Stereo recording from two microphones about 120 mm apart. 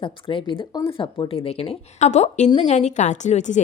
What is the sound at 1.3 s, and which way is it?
A woman's voice, 55° left (ahead or behind).